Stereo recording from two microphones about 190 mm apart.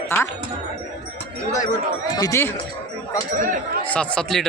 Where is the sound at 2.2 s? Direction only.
15° left (ahead or behind).